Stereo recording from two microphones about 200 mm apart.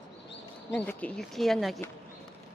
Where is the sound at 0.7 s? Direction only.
5° left (ahead or behind).